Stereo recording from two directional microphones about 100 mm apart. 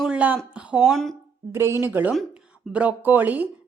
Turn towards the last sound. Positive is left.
turn(degrees=-15)  # may be behind; listen again after turning